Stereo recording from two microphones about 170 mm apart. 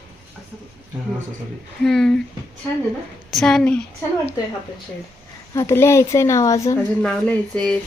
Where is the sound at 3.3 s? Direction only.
Centre (ahead or behind).